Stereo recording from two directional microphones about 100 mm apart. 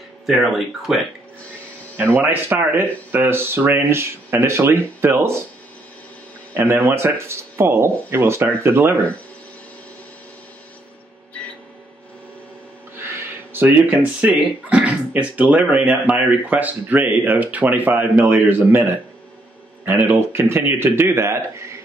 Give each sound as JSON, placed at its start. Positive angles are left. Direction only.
{"t": 0.3, "sound": "speech", "side_deg": 0}
{"t": 2.1, "sound": "speech", "side_deg": -20}
{"t": 6.5, "sound": "speech", "side_deg": -25}
{"t": 13.0, "sound": "speech", "side_deg": -20}